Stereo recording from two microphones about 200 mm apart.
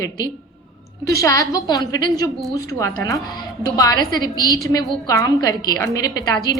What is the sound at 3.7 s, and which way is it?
A woman's voice, 15° left (ahead or behind).